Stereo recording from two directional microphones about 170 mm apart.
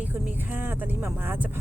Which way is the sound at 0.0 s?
10° right (ahead or behind).